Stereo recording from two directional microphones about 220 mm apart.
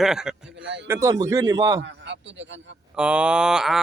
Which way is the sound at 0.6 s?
50° right (ahead or behind).